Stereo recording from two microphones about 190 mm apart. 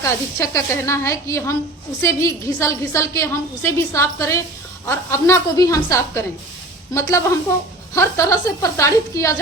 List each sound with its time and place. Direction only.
0.0 s a woman's voice: 15° left (ahead or behind)